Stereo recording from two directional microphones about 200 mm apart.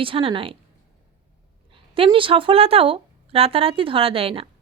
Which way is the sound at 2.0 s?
25° right (ahead or behind).